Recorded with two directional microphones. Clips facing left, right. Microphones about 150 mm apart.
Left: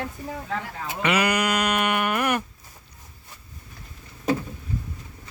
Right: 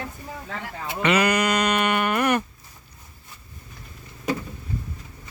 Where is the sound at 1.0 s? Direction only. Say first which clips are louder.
Right 2 dB; 10° left (ahead or behind).